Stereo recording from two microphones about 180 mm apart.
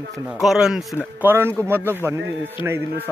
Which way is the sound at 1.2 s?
15° right (ahead or behind).